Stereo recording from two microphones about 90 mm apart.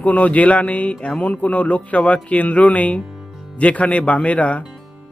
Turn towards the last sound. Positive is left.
turn(degrees=15)  # may be behind; listen again after turning